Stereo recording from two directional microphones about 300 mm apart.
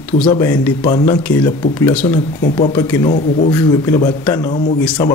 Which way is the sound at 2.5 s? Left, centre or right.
Centre.